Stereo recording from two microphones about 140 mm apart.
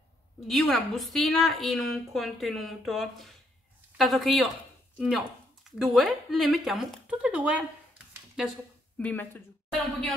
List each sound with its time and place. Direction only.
0.5 s a woman's voice: centre (ahead or behind)
8.9 s speech: 10° left (ahead or behind)